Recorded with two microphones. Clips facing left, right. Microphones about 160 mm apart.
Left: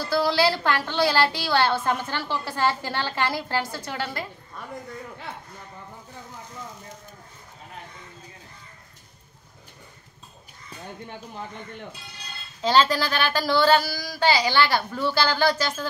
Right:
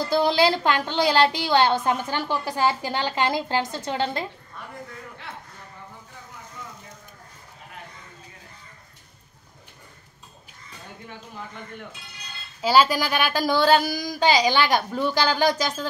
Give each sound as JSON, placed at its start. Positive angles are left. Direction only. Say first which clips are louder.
{"t": 0.0, "sound": "a woman's voice", "louder": "right 2 dB", "side_deg": -20}
{"t": 12.6, "sound": "a woman's voice", "louder": "right 1 dB", "side_deg": -10}